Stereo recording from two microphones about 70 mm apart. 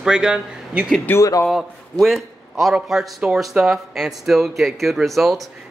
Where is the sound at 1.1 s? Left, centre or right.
Left.